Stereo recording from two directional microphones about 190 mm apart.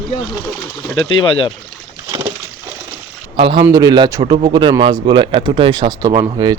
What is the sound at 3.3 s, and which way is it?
Speech, 25° right (ahead or behind).